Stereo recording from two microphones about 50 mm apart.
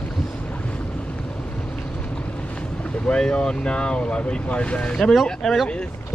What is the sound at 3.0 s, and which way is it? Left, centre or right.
Speech, centre.